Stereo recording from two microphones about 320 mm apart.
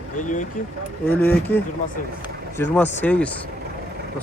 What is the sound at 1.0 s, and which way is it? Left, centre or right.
Speech, centre.